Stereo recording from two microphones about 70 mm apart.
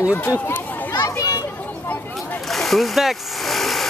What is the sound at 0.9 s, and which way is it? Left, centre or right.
Children playing, left.